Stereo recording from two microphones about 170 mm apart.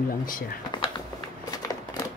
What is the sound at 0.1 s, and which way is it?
Speech, 55° left (ahead or behind).